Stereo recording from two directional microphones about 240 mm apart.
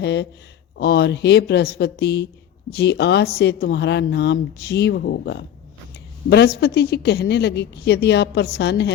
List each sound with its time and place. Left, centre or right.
0.0 s speech: left